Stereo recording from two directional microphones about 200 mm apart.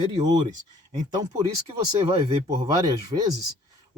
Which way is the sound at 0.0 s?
20° right (ahead or behind).